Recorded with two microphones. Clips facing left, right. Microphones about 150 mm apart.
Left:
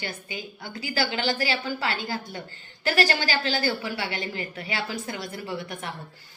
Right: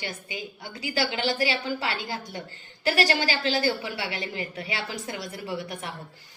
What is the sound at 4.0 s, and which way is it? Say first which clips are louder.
Speech: left 1 dB; 30° left (ahead or behind).